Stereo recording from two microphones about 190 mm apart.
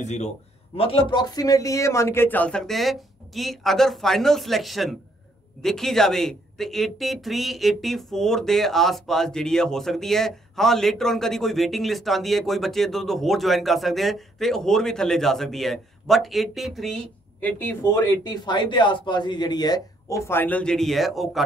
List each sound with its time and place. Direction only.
0.0 s a man's voice: 35° left (ahead or behind); by 18.2 s 10° left (ahead or behind)
18.2 s a man's voice: 20° left (ahead or behind); by 21.4 s centre (ahead or behind)